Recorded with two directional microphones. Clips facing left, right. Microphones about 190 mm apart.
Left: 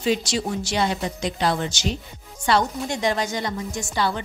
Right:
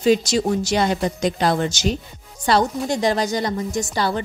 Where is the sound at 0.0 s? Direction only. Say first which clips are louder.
Right 6 dB; 40° right (ahead or behind).